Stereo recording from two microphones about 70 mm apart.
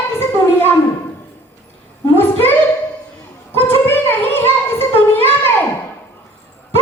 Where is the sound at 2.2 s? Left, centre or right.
Left.